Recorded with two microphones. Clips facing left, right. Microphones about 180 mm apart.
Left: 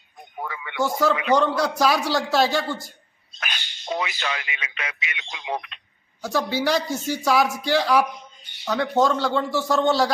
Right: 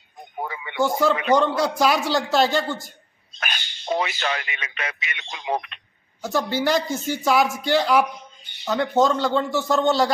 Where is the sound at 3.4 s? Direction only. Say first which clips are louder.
Right 3 dB; 45° right (ahead or behind).